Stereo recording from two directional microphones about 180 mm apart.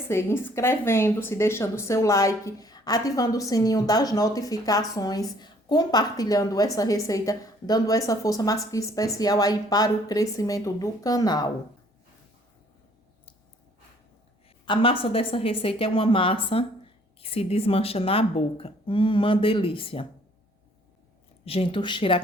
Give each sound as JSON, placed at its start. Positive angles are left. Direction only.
{"t": 0.1, "sound": "speech", "side_deg": 15}
{"t": 14.6, "sound": "speech", "side_deg": 30}
{"t": 21.4, "sound": "speech", "side_deg": 30}